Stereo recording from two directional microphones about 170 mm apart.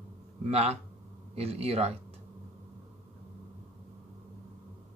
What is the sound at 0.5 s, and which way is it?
Speech, 40° right (ahead or behind).